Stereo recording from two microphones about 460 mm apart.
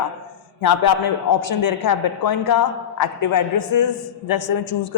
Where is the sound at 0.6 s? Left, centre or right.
Left.